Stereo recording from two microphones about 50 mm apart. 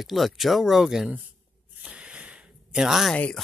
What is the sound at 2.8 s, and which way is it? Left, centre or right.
Speech, centre.